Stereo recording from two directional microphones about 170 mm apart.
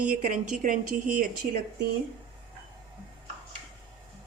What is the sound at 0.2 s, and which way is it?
A woman's voice, 50° right (ahead or behind).